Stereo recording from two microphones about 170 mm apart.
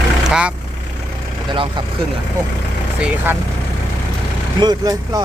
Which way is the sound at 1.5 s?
30° right (ahead or behind).